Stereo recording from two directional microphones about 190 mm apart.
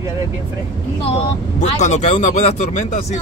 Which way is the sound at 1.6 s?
40° left (ahead or behind).